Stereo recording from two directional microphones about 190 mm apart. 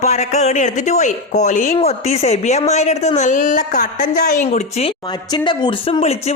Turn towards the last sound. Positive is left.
turn(degrees=35)  # may be behind; listen again after turning